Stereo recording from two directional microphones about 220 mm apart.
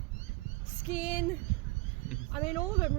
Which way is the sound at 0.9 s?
5° right (ahead or behind).